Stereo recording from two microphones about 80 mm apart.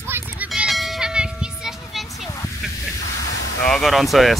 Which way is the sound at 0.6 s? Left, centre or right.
Centre.